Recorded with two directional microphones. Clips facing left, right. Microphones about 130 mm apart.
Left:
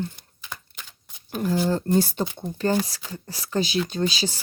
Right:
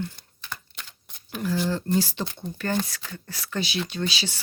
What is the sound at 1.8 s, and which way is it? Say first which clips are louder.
Speech: left 3 dB; 55° left (ahead or behind).